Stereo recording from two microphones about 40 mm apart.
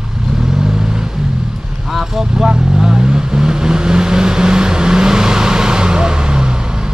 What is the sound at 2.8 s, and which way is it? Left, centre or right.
Vehicle, centre.